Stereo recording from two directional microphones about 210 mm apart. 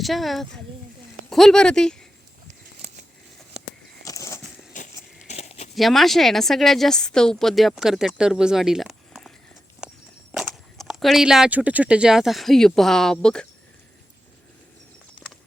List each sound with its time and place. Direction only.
0.0 s a woman's voice: centre (ahead or behind)
4.0 s a sound: 15° left (ahead or behind)
4.7 s biting: 40° left (ahead or behind)
5.3 s crumpling: 35° left (ahead or behind)
5.7 s a woman's voice: centre (ahead or behind)
10.3 s speech: centre (ahead or behind)
15.2 s clip-clop: 5° right (ahead or behind)